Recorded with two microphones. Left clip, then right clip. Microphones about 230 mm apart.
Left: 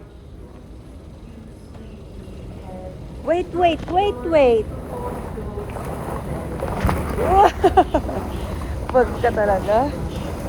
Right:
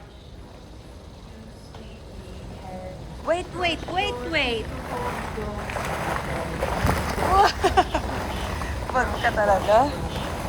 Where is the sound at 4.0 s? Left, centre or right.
Centre.